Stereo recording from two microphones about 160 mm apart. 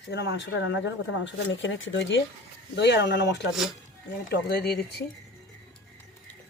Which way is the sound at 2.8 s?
90° left.